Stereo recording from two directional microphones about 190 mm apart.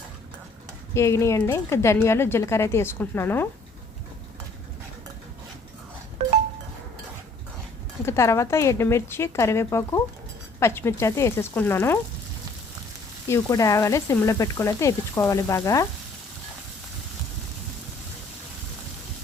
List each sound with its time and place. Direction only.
0.9 s speech: 15° left (ahead or behind)
8.0 s speech: 15° left (ahead or behind)
13.2 s speech: 15° left (ahead or behind)